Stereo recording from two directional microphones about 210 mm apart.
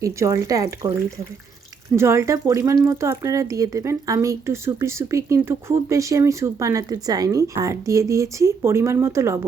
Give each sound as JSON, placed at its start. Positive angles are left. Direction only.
{"t": 0.0, "sound": "speech", "side_deg": -15}
{"t": 2.0, "sound": "speech", "side_deg": -10}